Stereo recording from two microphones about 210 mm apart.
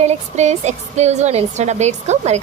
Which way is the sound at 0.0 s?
30° right (ahead or behind).